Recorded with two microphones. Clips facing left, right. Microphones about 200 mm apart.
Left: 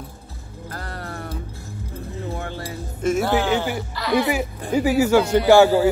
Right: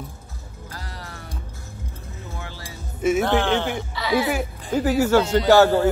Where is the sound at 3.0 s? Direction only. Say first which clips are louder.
Right 1 dB; 5° right (ahead or behind).